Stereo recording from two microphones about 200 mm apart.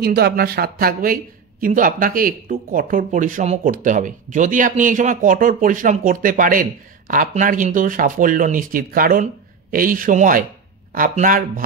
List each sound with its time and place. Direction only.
0.0 s speech: 50° right (ahead or behind)